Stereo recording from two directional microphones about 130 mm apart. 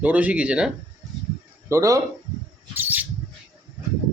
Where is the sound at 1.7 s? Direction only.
25° right (ahead or behind).